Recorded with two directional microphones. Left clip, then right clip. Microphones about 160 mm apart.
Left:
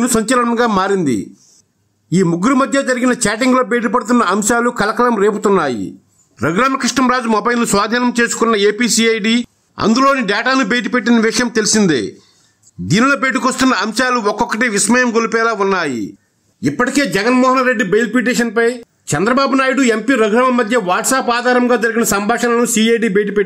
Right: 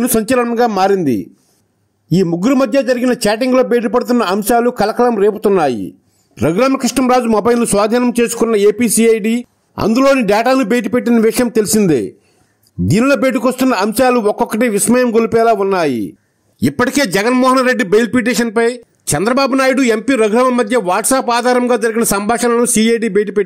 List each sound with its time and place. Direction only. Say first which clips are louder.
0.0 s speech: even; 25° right (ahead or behind)
2.3 s speech: right 2 dB; 20° right (ahead or behind)
6.3 s speech: right 1 dB; 25° right (ahead or behind)
12.8 s speech: right 1 dB; 25° right (ahead or behind)
16.6 s a man's voice: right 1 dB; 55° right (ahead or behind); by 23.4 s 35° right (ahead or behind)